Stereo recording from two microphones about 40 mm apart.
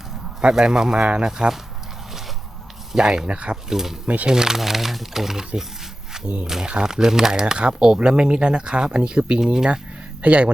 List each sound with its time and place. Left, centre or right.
0.4 s speech: right
2.9 s speech: centre
3.2 s speech: right
3.7 s speech: centre
6.2 s speech: right
6.7 s speech: centre
9.7 s a sound: right